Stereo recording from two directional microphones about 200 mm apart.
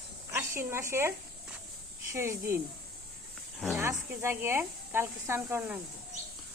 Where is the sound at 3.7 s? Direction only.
15° right (ahead or behind).